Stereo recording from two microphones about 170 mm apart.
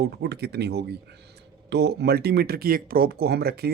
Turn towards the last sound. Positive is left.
turn(degrees=-70)  # may be behind; listen again after turning